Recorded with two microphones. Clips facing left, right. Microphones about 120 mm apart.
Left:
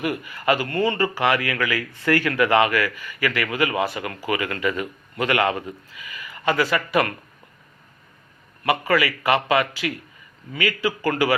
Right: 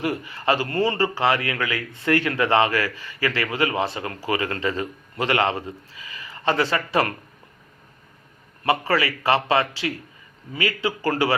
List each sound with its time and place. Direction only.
0.0 s a man's voice: 30° right (ahead or behind)
8.6 s speech: 30° right (ahead or behind)